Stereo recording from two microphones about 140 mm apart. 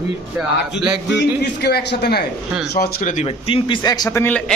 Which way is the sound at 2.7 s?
85° left.